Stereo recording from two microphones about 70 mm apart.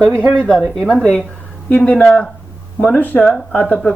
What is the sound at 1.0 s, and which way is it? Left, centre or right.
Speech, centre.